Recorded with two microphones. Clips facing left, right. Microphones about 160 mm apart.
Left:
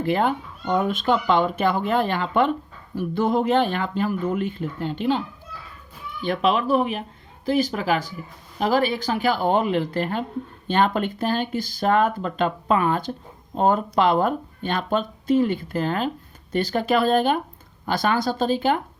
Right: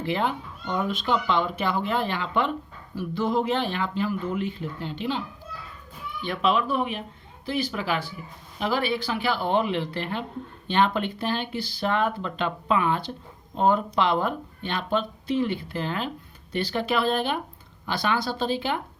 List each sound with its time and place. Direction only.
0.0 s speech: 50° left (ahead or behind)
6.2 s speech: 40° left (ahead or behind)